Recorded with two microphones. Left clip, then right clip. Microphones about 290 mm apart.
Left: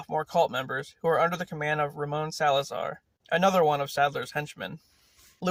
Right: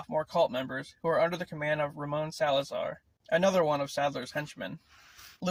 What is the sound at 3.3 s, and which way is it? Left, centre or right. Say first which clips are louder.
Speech: left 3 dB; left.